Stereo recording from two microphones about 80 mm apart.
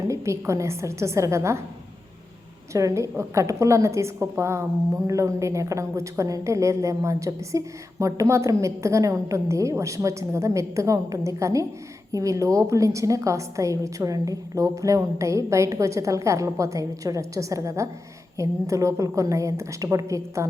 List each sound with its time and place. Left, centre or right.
0.1 s a woman's voice: right
2.7 s a woman's voice: right